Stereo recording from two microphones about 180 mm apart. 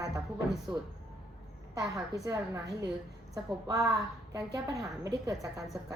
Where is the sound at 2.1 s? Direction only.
20° right (ahead or behind).